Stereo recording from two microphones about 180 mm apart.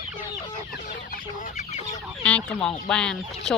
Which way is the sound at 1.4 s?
45° left (ahead or behind).